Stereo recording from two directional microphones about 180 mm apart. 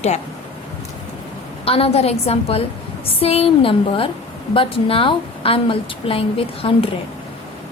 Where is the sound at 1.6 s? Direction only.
35° left (ahead or behind).